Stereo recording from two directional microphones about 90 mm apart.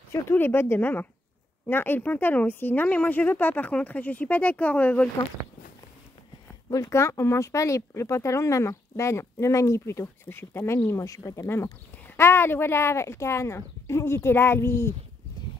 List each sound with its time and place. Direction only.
0.1 s a woman's voice: 25° left (ahead or behind)
6.7 s speech: 35° left (ahead or behind)